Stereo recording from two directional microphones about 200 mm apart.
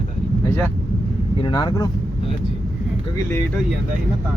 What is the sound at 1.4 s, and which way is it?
Speech, 20° left (ahead or behind).